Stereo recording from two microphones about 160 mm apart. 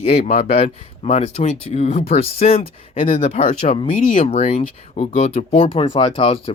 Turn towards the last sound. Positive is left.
turn(degrees=35)  # may be behind; listen again after turning